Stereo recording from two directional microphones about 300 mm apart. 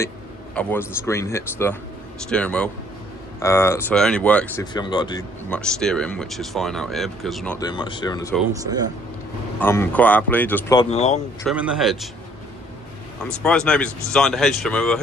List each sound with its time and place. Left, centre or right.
0.5 s speech: centre
5.5 s speech: centre
9.6 s speech: centre
11.4 s speech: centre
13.2 s speech: centre